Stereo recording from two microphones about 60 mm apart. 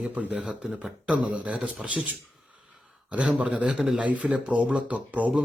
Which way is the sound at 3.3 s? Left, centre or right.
Centre.